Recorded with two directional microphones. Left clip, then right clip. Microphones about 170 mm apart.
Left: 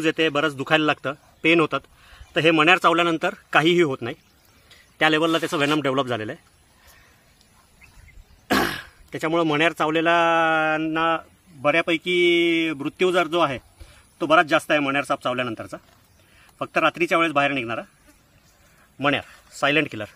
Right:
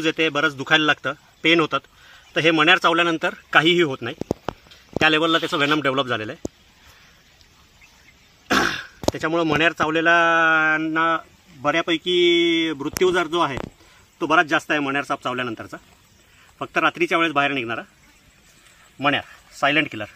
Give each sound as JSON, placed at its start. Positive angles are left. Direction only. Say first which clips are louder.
{"t": 0.2, "sound": "a man's voice", "louder": "right 1 dB", "side_deg": 25}
{"t": 8.5, "sound": "a man's voice", "louder": "right 2 dB", "side_deg": 25}
{"t": 18.9, "sound": "a man's voice", "louder": "right 1 dB", "side_deg": 30}